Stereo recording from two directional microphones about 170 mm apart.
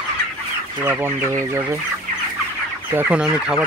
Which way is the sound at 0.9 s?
15° right (ahead or behind).